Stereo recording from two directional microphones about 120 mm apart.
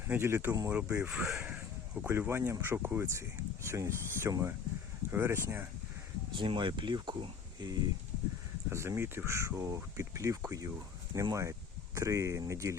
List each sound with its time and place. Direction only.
0.1 s speech: 20° right (ahead or behind)
0.7 s speech: 10° right (ahead or behind)
6.3 s speech: 45° right (ahead or behind)
8.7 s speech: 20° right (ahead or behind)